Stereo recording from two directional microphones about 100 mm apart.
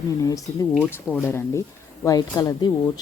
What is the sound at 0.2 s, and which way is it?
Speech, 35° left (ahead or behind).